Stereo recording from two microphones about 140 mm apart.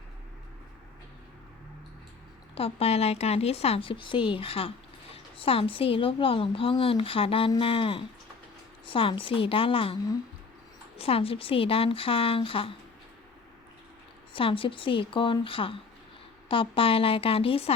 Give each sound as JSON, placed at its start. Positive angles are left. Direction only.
{"t": 2.6, "sound": "a woman's voice", "side_deg": 45}
{"t": 14.3, "sound": "a woman's voice", "side_deg": 40}